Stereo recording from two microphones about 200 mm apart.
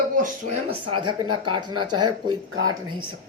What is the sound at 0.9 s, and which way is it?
Speech, 25° right (ahead or behind).